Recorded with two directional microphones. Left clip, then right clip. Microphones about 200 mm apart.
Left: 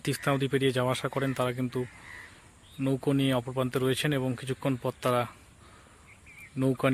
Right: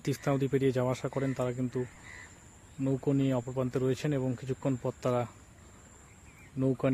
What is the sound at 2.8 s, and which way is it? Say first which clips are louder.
Speech: left 2 dB; 10° left (ahead or behind).